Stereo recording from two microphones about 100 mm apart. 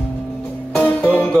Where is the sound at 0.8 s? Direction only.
15° left (ahead or behind).